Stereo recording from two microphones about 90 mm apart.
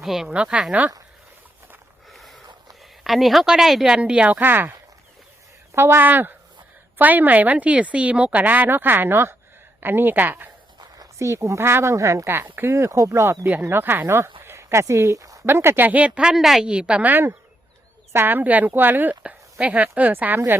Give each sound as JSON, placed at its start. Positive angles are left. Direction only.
{"t": 0.0, "sound": "speech", "side_deg": -5}
{"t": 2.0, "sound": "a sound", "side_deg": 0}
{"t": 3.0, "sound": "speech", "side_deg": 0}
{"t": 5.7, "sound": "speech", "side_deg": -25}
{"t": 11.2, "sound": "speech", "side_deg": -35}
{"t": 14.4, "sound": "a sound", "side_deg": -30}
{"t": 15.4, "sound": "speech", "side_deg": -25}